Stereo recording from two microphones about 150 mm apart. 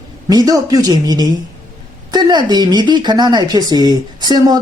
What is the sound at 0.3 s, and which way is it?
Speech, 25° right (ahead or behind).